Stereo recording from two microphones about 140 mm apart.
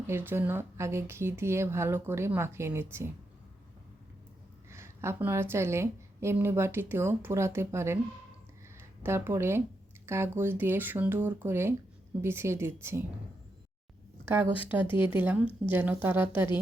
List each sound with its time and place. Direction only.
0.1 s a woman's voice: 15° right (ahead or behind)
4.7 s a woman's voice: 20° right (ahead or behind)
14.3 s a woman's voice: 15° right (ahead or behind)